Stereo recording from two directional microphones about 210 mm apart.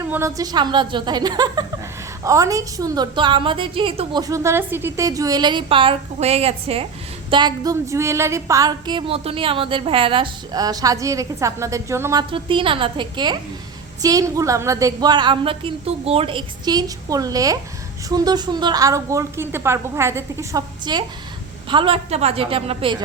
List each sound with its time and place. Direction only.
0.1 s a woman's voice: 15° right (ahead or behind)
12.3 s a woman's voice: 25° right (ahead or behind)